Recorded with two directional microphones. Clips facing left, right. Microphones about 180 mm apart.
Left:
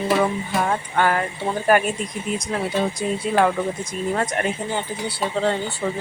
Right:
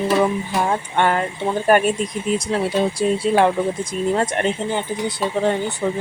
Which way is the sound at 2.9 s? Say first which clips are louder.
Right 5 dB; 30° right (ahead or behind).